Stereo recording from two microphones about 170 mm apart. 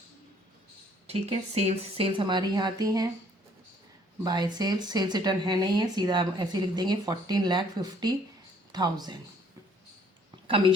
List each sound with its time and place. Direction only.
1.0 s speech: 40° right (ahead or behind); by 3.1 s 20° right (ahead or behind)
4.2 s speech: 25° right (ahead or behind)
10.4 s a woman's voice: 30° right (ahead or behind)